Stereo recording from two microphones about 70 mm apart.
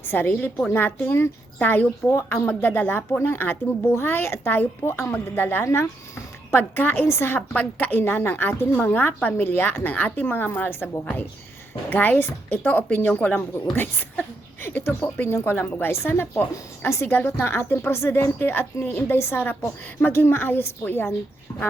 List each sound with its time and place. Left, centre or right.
0.1 s a woman's voice: left
5.6 s a woman's voice: left
11.9 s a woman's voice: left